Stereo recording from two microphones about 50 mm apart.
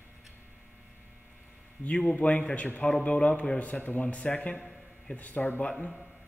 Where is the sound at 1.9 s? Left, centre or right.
Left.